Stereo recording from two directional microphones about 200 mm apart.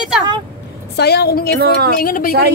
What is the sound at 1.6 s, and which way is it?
Speech, 50° right (ahead or behind).